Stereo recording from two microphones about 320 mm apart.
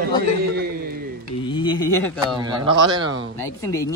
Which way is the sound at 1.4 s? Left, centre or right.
Centre.